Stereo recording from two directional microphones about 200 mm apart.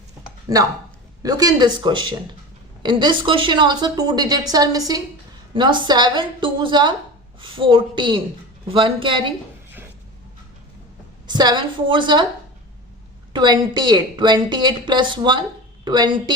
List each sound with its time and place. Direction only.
0.4 s a woman's voice: 20° right (ahead or behind)
11.3 s a woman's voice: 20° right (ahead or behind)
13.3 s a woman's voice: 20° right (ahead or behind)